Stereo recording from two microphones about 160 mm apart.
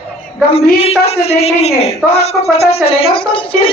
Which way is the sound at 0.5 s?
40° left (ahead or behind).